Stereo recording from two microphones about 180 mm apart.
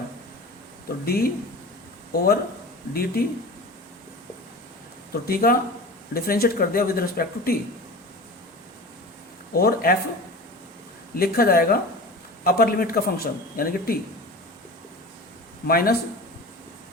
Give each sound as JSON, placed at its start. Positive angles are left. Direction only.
{"t": 1.0, "sound": "speech", "side_deg": 60}
{"t": 5.2, "sound": "speech", "side_deg": 55}
{"t": 9.5, "sound": "speech", "side_deg": 55}
{"t": 11.2, "sound": "speech", "side_deg": 55}
{"t": 15.6, "sound": "speech", "side_deg": 55}